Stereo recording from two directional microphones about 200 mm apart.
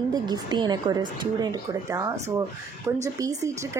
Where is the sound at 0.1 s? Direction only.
20° right (ahead or behind).